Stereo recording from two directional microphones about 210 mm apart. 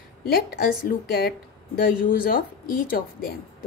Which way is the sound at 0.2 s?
45° left (ahead or behind).